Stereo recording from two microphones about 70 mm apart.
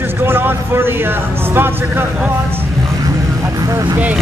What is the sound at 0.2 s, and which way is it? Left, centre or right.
Speech, right.